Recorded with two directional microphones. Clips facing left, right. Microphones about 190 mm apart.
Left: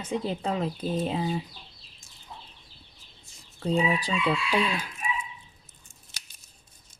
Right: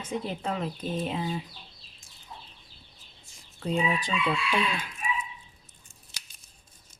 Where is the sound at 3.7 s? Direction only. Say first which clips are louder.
Left 2 dB; 35° left (ahead or behind).